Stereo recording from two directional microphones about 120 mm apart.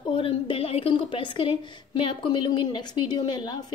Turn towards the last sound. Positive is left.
turn(degrees=35)  # may be behind; listen again after turning